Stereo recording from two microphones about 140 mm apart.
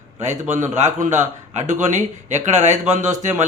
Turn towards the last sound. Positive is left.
turn(degrees=-60)  # may be behind; listen again after turning